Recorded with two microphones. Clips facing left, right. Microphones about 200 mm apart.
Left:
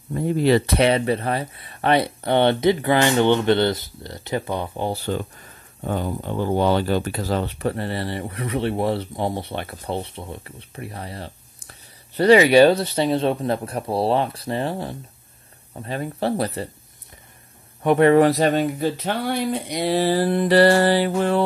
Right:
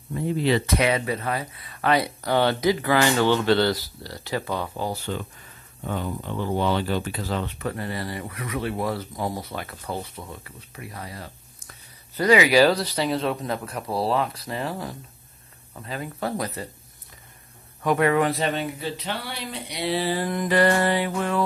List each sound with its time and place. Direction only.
0.1 s speech: 45° left (ahead or behind)
0.7 s speech: 30° left (ahead or behind)
4.9 s speech: 35° left (ahead or behind)
17.8 s speech: 30° left (ahead or behind)
18.4 s speech: 45° left (ahead or behind)